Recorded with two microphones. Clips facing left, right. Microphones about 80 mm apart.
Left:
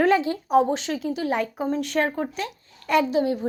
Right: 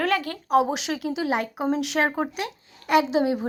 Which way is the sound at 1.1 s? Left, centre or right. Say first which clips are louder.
Even; right.